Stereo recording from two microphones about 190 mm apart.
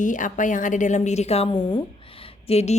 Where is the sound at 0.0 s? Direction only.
40° left (ahead or behind).